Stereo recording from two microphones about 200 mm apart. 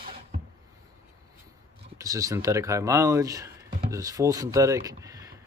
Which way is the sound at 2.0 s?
15° right (ahead or behind).